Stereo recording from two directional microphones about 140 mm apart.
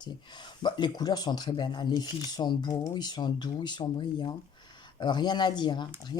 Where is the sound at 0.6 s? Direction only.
30° left (ahead or behind).